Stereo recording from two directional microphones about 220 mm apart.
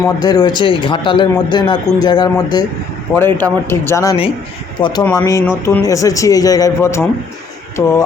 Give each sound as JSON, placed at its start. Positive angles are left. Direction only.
{"t": 0.2, "sound": "a man's voice", "side_deg": 20}